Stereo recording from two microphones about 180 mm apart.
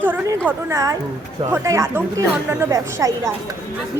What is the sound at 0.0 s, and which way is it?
Speech, 10° right (ahead or behind).